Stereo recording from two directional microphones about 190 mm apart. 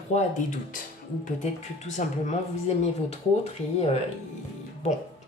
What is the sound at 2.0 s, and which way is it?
Speech, 40° left (ahead or behind).